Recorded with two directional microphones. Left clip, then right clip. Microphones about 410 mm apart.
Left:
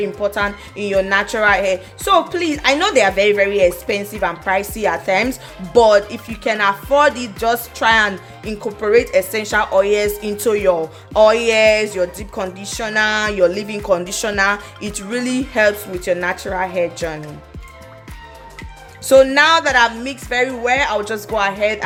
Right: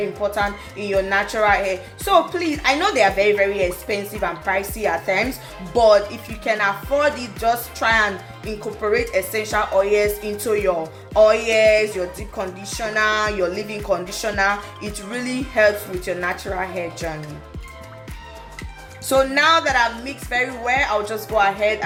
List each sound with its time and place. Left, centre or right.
0.2 s speech: left
19.0 s speech: left